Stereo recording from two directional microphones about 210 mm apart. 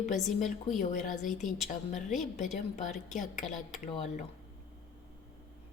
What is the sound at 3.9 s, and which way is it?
Speech, 35° left (ahead or behind).